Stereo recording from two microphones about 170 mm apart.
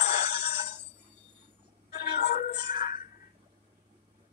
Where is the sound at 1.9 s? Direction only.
70° left (ahead or behind).